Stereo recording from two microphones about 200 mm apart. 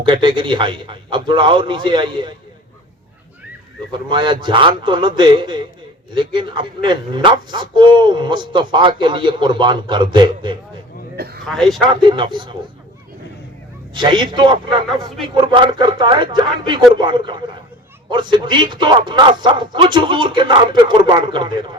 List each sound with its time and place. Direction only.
0.0 s a man's voice: 25° right (ahead or behind)
3.9 s a man's voice: 25° right (ahead or behind)
11.2 s a sound: 50° right (ahead or behind)
11.4 s speech: centre (ahead or behind)
11.9 s a man's voice: 25° right (ahead or behind)
13.9 s a man's voice: 20° right (ahead or behind)